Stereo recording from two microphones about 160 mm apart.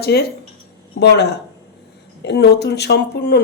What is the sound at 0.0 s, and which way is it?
Speech, 80° left.